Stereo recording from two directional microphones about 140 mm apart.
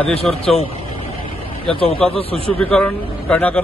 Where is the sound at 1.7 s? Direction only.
40° left (ahead or behind).